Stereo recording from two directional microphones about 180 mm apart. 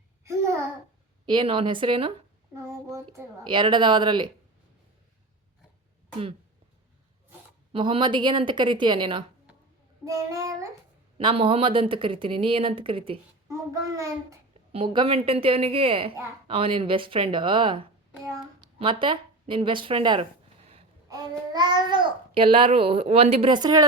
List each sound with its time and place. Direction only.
1.2 s a child's voice: 25° right (ahead or behind)
2.6 s a child's voice: 15° right (ahead or behind)
7.7 s a child's voice: 30° right (ahead or behind)
11.2 s a child's voice: 30° right (ahead or behind)
13.5 s a child's voice: 20° right (ahead or behind)
14.7 s a woman's voice: 30° right (ahead or behind)